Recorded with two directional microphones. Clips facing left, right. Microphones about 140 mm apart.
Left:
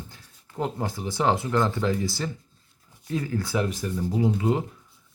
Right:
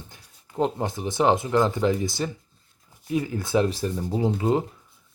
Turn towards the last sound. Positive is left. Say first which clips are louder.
# right 1 dB
turn(degrees=-25)  # may be behind; listen again after turning